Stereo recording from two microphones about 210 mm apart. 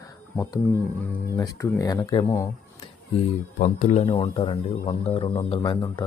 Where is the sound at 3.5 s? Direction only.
35° left (ahead or behind); by 6.0 s 20° left (ahead or behind).